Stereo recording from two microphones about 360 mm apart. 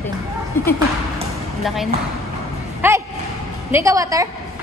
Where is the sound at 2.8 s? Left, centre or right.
Centre.